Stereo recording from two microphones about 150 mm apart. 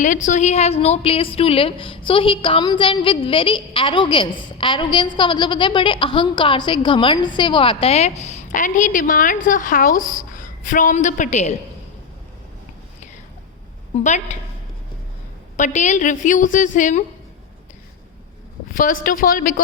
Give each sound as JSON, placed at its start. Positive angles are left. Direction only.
{"t": 0.0, "sound": "a woman's voice", "side_deg": 55}
{"t": 13.9, "sound": "a woman's voice", "side_deg": 50}
{"t": 15.5, "sound": "a woman's voice", "side_deg": 55}
{"t": 18.7, "sound": "a woman's voice", "side_deg": 65}